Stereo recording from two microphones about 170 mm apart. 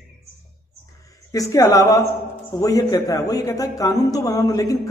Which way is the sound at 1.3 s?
20° left (ahead or behind).